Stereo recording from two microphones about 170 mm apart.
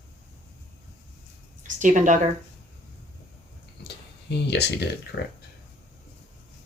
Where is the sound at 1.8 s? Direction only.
50° right (ahead or behind).